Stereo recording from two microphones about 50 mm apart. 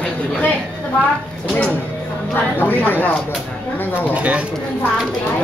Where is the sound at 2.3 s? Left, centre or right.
Left.